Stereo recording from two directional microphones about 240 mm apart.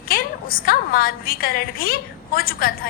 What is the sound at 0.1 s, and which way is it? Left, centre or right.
A woman's voice, left.